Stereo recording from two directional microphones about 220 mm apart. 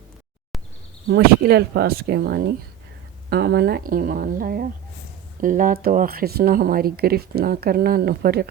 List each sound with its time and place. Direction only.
1.2 s speech: 45° right (ahead or behind)